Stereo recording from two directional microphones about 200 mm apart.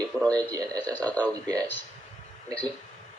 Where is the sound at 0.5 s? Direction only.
20° right (ahead or behind).